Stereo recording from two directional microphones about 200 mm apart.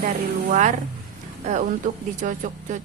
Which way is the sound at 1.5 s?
40° right (ahead or behind).